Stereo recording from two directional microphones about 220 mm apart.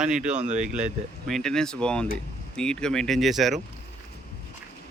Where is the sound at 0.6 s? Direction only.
5° right (ahead or behind).